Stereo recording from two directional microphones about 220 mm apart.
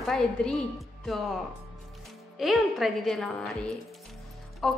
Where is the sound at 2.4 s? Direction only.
Centre (ahead or behind).